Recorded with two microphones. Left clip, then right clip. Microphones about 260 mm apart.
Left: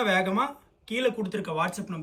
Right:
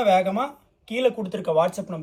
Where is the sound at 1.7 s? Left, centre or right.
Centre.